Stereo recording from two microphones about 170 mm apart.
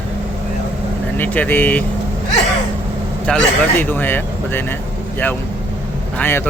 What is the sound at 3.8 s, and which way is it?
Speech, 10° left (ahead or behind).